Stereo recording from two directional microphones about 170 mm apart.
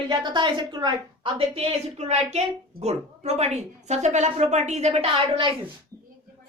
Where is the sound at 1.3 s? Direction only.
35° right (ahead or behind).